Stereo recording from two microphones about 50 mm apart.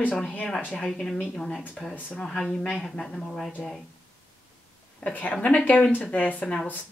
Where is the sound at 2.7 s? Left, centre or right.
Centre.